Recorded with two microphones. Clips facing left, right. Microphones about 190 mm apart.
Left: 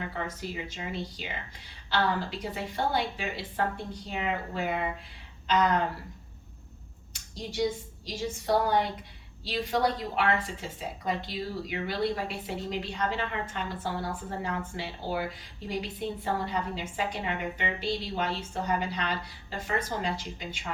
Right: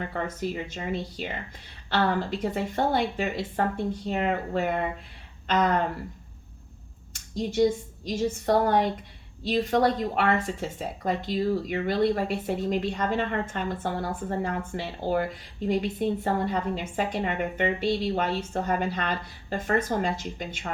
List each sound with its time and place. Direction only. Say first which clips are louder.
0.1 s a woman's voice: right 5 dB; 50° right (ahead or behind)
2.4 s a woman's voice: right 5 dB; 50° right (ahead or behind)
7.1 s a woman's voice: right 9 dB; 50° right (ahead or behind)